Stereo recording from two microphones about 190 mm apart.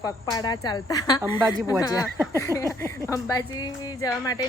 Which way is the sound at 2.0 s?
10° right (ahead or behind).